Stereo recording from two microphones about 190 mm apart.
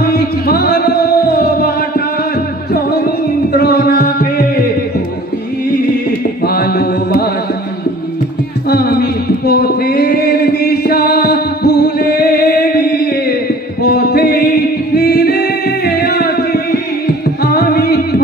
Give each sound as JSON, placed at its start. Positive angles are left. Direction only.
{"t": 0.0, "sound": "music", "side_deg": 55}
{"t": 6.4, "sound": "carnatic music", "side_deg": 55}
{"t": 8.6, "sound": "a sound", "side_deg": 55}
{"t": 13.8, "sound": "music", "side_deg": 55}